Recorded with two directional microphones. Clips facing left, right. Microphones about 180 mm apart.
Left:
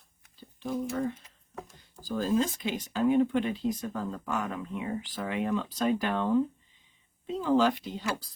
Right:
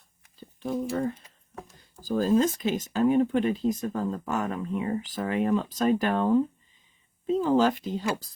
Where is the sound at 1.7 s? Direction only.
45° right (ahead or behind).